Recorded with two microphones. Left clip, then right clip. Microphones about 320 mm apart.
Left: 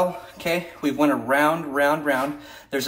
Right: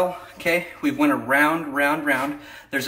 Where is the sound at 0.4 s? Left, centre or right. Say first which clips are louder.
Right 3 dB; centre.